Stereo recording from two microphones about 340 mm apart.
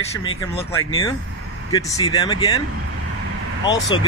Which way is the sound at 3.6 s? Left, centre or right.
Centre.